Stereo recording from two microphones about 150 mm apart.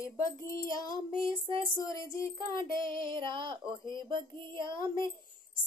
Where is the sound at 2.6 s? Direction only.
30° right (ahead or behind).